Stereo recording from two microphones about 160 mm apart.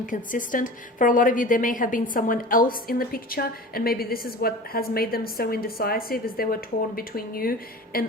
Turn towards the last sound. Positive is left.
turn(degrees=65)  # may be behind; listen again after turning